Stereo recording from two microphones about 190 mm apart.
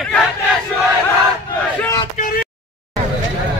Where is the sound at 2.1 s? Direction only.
45° left (ahead or behind).